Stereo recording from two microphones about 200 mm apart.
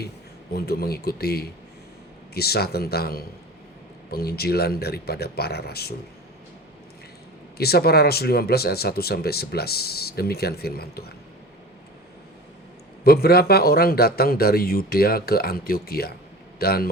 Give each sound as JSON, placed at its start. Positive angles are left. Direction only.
{"t": 0.5, "sound": "speech", "side_deg": 50}
{"t": 7.6, "sound": "speech", "side_deg": 50}
{"t": 13.1, "sound": "speech", "side_deg": 50}